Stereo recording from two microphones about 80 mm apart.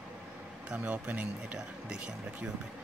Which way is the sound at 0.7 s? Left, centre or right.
Centre.